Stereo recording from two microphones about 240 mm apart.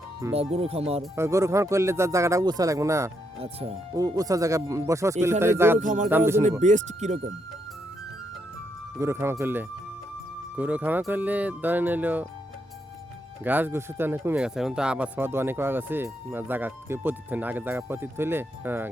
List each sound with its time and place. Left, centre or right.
0.3 s speech: right
1.1 s speech: centre
3.4 s speech: right
5.8 s speech: right
6.1 s speech: centre
6.6 s speech: right
9.0 s speech: centre
13.4 s speech: centre